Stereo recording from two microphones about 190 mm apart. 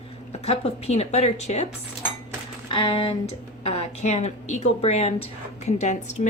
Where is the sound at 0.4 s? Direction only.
30° left (ahead or behind).